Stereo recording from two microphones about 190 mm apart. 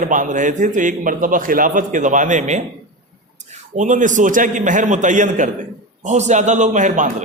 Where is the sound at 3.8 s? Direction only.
40° right (ahead or behind).